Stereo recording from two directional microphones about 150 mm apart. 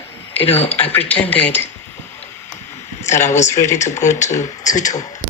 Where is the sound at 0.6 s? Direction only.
40° left (ahead or behind).